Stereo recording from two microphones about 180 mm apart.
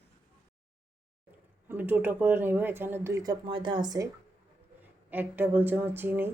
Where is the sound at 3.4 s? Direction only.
30° right (ahead or behind).